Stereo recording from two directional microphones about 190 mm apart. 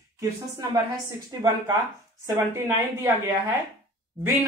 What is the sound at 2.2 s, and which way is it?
A woman's voice, 15° right (ahead or behind).